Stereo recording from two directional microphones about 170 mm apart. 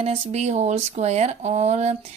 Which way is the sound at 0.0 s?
40° right (ahead or behind).